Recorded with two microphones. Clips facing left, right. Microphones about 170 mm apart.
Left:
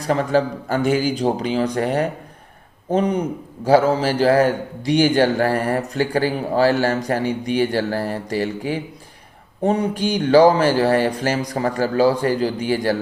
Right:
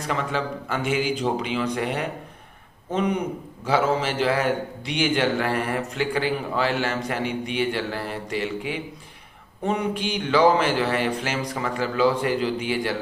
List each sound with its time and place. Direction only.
0.0 s a man's voice: 40° left (ahead or behind)